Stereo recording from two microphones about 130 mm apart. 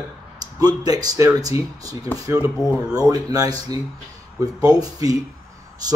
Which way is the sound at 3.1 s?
30° right (ahead or behind).